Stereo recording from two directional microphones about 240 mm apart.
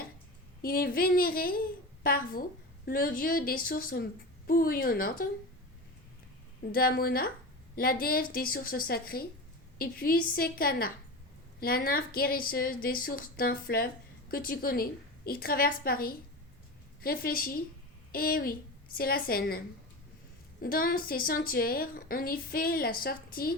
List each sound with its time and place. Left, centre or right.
0.6 s a woman's voice: left
6.7 s a woman's voice: left